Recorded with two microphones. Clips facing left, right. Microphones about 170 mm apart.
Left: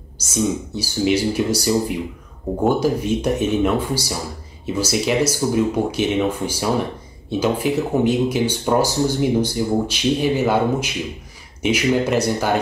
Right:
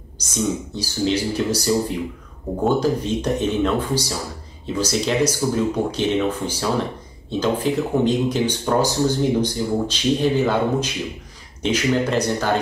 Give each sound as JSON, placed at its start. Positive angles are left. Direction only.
{"t": 0.2, "sound": "speech", "side_deg": 10}